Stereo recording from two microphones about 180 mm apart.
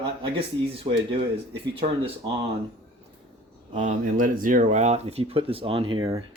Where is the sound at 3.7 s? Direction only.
45° right (ahead or behind).